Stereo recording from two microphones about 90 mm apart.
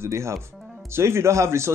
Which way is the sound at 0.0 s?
30° right (ahead or behind).